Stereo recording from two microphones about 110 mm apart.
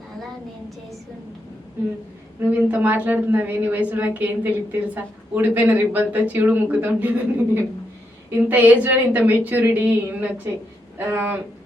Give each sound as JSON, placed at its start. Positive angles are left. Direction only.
{"t": 2.4, "sound": "speech", "side_deg": -15}